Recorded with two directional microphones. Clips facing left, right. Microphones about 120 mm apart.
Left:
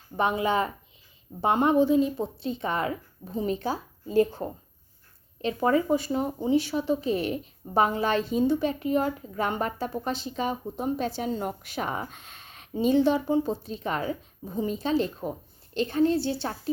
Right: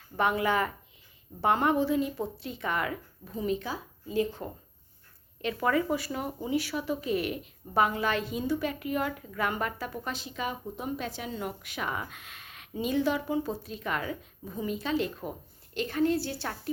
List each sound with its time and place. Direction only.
0.2 s speech: 25° left (ahead or behind)